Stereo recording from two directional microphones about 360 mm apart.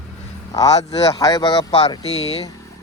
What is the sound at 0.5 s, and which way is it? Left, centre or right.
Speech, centre.